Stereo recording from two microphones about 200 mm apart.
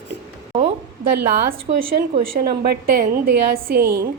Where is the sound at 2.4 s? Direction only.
50° right (ahead or behind).